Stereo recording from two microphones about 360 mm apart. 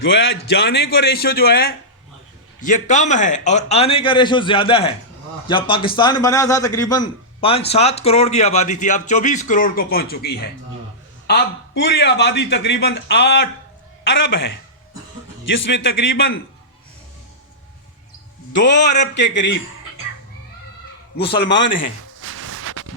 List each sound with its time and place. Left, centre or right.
0.0 s a man's voice: left
15.7 s a man's voice: left
18.5 s a man's voice: left
21.2 s a man's voice: left
21.7 s speech: left
22.2 s a sound: right